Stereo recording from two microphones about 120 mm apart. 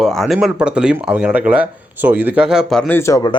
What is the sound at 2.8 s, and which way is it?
Speech, 15° left (ahead or behind).